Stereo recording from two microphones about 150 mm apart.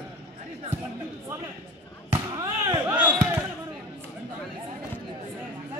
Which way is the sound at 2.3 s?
20° right (ahead or behind).